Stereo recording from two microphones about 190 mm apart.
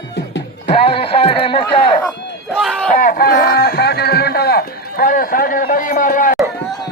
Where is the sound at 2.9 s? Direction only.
45° left (ahead or behind).